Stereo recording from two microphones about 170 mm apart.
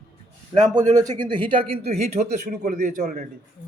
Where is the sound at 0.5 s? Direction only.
45° right (ahead or behind).